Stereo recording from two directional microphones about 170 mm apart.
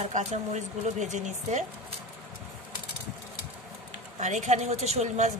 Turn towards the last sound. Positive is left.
turn(degrees=-45)  # may be behind; listen again after turning